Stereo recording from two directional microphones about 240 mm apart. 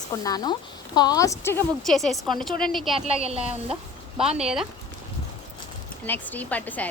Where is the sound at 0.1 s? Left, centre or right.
Centre.